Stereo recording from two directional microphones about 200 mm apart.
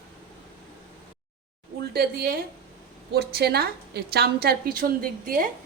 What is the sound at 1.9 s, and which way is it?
A woman's voice, 50° right (ahead or behind).